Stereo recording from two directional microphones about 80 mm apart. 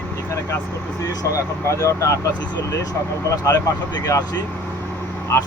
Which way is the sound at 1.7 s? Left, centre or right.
Left.